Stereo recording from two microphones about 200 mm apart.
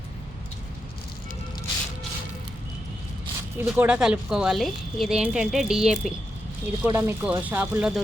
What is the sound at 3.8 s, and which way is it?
Speech, 5° right (ahead or behind).